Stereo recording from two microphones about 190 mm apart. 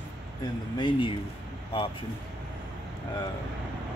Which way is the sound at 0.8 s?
25° left (ahead or behind).